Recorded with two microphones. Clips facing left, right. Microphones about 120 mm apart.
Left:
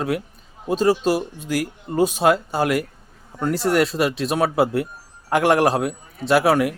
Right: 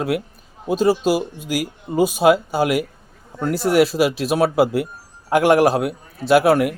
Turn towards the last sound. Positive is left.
turn(degrees=0)  # may be behind; listen again after turning